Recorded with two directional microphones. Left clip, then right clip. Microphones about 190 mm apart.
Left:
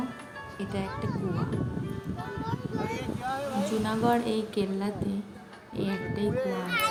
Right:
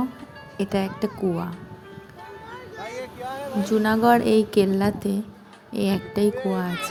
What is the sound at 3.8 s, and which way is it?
Speech, 35° right (ahead or behind).